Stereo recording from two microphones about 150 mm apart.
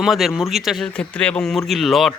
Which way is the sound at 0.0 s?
Centre (ahead or behind).